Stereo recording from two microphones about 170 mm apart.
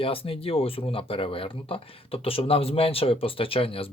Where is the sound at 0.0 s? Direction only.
35° left (ahead or behind).